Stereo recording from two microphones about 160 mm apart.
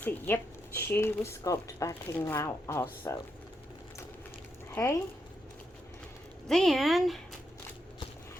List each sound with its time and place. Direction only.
0.3 s speech: 15° left (ahead or behind)
4.7 s speech: 15° left (ahead or behind)
6.5 s speech: centre (ahead or behind)